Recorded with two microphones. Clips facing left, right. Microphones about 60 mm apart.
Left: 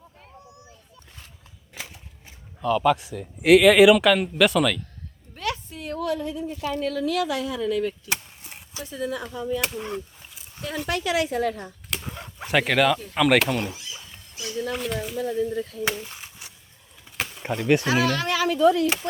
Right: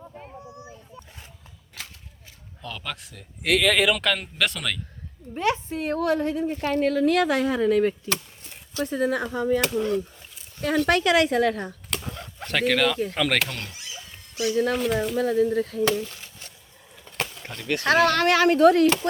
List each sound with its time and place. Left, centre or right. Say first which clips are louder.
2.6 s speech: left 15 dB; centre
5.3 s a woman's voice: right 6 dB; right
8.1 s chop: even; centre
8.8 s a woman's voice: right 6 dB; right
10.8 s speech: right 3 dB; right
11.9 s a sound: right 1 dB; centre
12.4 s speech: left 2 dB; centre
14.3 s speech: right 7 dB; right
14.8 s speech: right 5 dB; centre
15.1 s speech: right 3 dB; right
15.8 s a sound: right 5 dB; centre
17.1 s a sound: right 1 dB; centre
17.3 s speech: left 12 dB; left
17.8 s speech: right 4 dB; right